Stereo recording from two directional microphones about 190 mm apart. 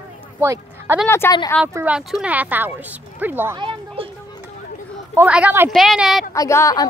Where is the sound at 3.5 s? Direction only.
25° right (ahead or behind).